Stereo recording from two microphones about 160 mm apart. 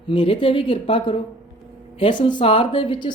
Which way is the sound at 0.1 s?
35° left (ahead or behind).